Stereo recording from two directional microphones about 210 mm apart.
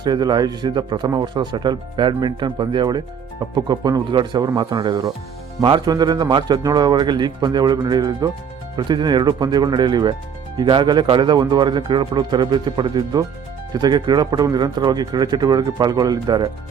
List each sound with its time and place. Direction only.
0.0 s speech: 20° right (ahead or behind)